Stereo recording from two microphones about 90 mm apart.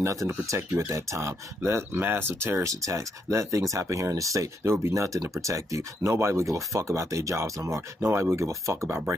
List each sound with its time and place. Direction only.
0.0 s speech: 35° right (ahead or behind)